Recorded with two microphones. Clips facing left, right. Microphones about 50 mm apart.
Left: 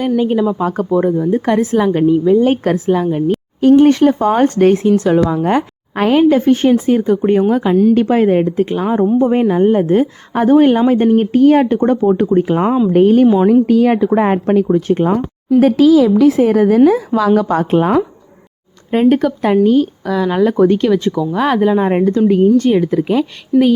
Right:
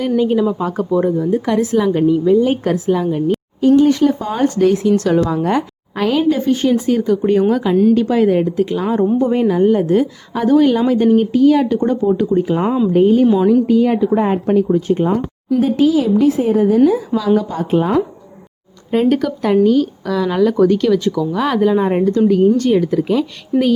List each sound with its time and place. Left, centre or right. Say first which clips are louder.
0.2 s a woman's voice: left 1 dB; centre
2.4 s a woman's voice: left 2 dB; left
3.6 s speech: left 3 dB; left
4.9 s a woman's voice: left 2 dB; centre; by 6.7 s left
6.7 s a woman's voice: left 2 dB; left
7.9 s a woman's voice: left 2 dB; left
15.6 s a woman's voice: left 5 dB; left
17.2 s speech: left 4 dB; left
18.9 s a woman's voice: left 3 dB; left
20.4 s a woman's voice: left 1 dB; left
21.6 s speech: right 1 dB; centre
21.8 s a woman's voice: left 1 dB; left
23.5 s a sound: left 4 dB; centre